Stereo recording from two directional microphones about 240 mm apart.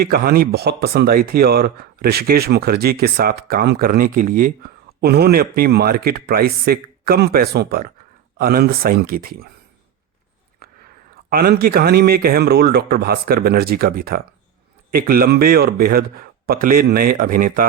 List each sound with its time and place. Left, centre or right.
0.0 s speech: right
10.6 s biting: right
11.3 s speech: right